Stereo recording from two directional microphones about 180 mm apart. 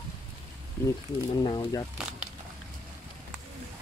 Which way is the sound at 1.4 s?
25° left (ahead or behind).